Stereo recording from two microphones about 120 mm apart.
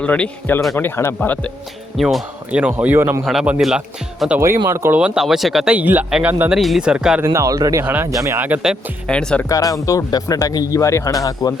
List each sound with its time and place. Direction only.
0.0 s speech: 10° left (ahead or behind)
2.0 s speech: centre (ahead or behind); by 3.2 s 20° right (ahead or behind)
3.2 s speech: 5° right (ahead or behind)
4.7 s speech: 20° right (ahead or behind)
4.9 s speech: 5° right (ahead or behind)
7.3 s speech: 25° right (ahead or behind); by 8.8 s 10° right (ahead or behind)
9.0 s speech: 10° left (ahead or behind)
9.5 s speech: 30° left (ahead or behind)